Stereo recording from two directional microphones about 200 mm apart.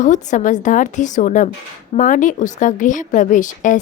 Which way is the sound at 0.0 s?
40° left (ahead or behind).